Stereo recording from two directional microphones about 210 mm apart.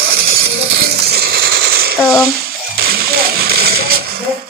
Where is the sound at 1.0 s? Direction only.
50° right (ahead or behind).